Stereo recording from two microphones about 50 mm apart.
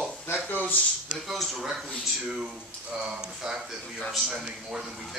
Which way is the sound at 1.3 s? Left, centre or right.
Centre.